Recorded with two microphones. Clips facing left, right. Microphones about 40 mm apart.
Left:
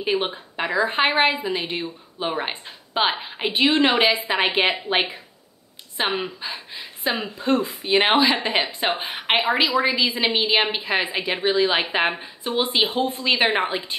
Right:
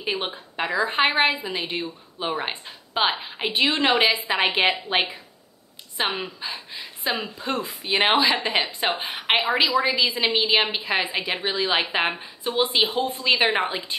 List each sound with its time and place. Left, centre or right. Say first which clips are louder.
0.0 s a woman's voice: left 4 dB; centre
6.0 s speech: left 3 dB; left
6.4 s a woman's voice: left 1 dB; centre